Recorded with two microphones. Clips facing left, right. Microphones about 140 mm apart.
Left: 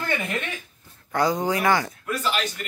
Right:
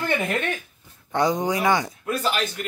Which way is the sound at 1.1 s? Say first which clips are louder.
Right 1 dB; 20° right (ahead or behind).